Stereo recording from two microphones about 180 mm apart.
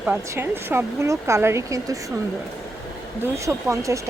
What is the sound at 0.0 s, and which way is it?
Speech, 10° right (ahead or behind).